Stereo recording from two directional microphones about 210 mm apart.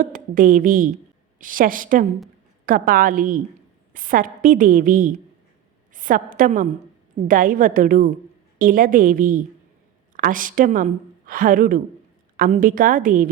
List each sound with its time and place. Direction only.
0.0 s a woman's voice: 40° right (ahead or behind)